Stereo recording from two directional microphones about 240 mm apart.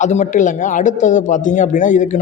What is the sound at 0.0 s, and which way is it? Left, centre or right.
A man's voice, left.